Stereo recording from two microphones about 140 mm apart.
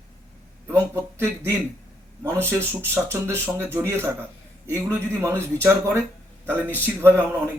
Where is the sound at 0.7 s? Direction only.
15° right (ahead or behind).